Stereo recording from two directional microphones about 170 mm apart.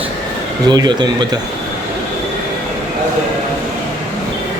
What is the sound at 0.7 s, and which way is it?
Speech, 25° right (ahead or behind).